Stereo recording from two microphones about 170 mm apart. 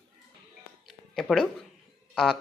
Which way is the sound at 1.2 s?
Centre (ahead or behind).